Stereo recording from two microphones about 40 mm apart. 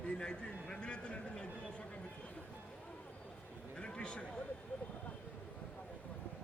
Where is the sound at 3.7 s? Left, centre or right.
Left.